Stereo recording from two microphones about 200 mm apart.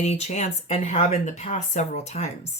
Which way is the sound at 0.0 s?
35° left (ahead or behind).